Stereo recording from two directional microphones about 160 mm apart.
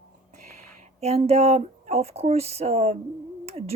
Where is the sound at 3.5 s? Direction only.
40° right (ahead or behind).